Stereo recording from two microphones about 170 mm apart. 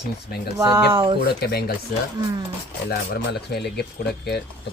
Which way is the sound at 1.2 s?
65° left (ahead or behind).